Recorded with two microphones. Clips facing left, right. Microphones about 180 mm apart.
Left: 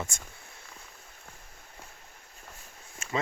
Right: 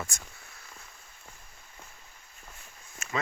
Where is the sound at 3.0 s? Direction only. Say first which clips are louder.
Left 2 dB; 30° left (ahead or behind).